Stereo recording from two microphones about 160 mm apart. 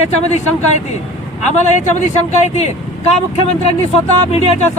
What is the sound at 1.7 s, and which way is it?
Speech, 45° left (ahead or behind).